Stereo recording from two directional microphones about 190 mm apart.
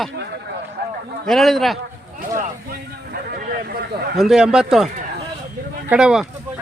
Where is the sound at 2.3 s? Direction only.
50° right (ahead or behind).